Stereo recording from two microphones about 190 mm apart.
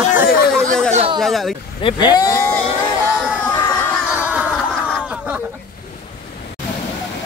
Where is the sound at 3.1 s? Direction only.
5° right (ahead or behind).